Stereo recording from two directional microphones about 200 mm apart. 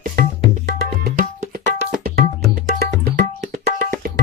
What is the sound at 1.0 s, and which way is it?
Tabla, 50° right (ahead or behind).